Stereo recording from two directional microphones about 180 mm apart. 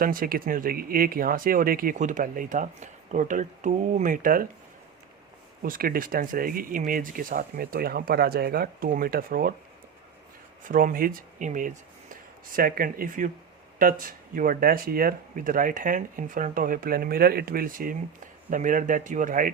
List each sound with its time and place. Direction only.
0.0 s speech: 50° right (ahead or behind)
5.6 s speech: 50° right (ahead or behind)
10.6 s speech: 50° right (ahead or behind)